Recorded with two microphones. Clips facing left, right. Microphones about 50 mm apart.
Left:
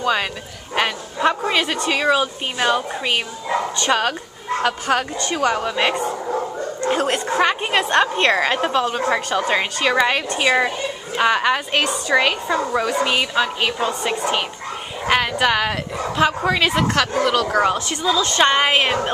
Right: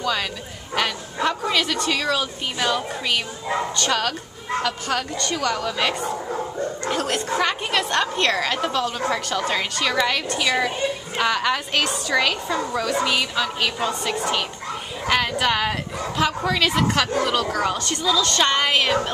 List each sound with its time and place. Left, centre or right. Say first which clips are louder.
0.0 s a woman's voice: left 4 dB; left